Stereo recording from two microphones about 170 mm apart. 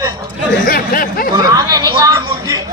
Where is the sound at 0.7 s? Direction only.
55° left (ahead or behind).